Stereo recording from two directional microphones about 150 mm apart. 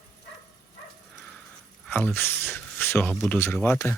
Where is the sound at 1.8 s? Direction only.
10° left (ahead or behind).